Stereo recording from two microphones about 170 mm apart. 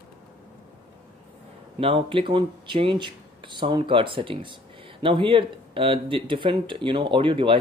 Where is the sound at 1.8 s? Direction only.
30° right (ahead or behind).